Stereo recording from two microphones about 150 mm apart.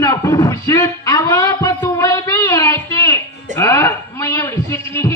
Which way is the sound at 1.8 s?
20° left (ahead or behind).